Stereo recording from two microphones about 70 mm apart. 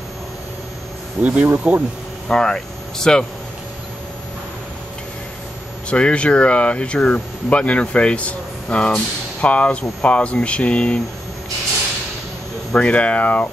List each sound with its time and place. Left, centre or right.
1.2 s speech: right
2.2 s speech: centre
5.9 s speech: centre
12.7 s speech: centre